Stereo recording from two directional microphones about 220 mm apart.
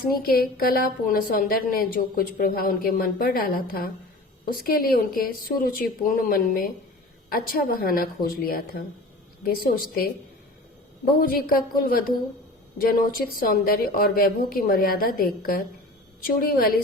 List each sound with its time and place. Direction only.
0.0 s a woman's voice: 40° left (ahead or behind)
11.1 s a woman's voice: 40° left (ahead or behind)